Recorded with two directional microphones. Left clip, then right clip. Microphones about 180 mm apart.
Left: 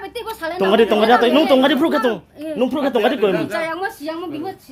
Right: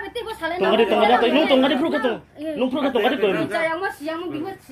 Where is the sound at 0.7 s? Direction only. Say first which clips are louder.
Left 3 dB; 50° left (ahead or behind).